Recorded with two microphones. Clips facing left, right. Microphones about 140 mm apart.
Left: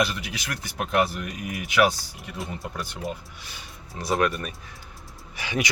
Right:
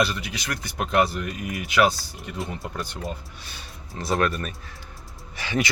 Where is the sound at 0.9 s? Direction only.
10° left (ahead or behind).